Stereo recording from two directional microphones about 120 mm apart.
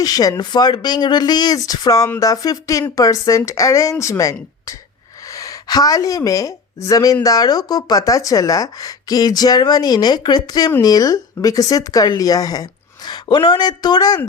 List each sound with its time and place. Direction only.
0.0 s a woman's voice: 30° left (ahead or behind)